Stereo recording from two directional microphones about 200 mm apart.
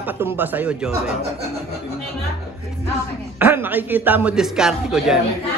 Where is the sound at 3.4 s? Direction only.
10° right (ahead or behind).